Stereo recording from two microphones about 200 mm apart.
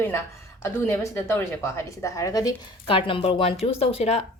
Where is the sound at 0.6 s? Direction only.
15° left (ahead or behind).